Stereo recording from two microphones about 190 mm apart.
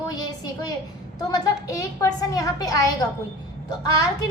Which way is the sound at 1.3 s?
15° left (ahead or behind).